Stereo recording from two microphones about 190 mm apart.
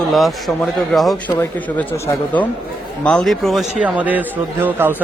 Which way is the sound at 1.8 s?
15° left (ahead or behind).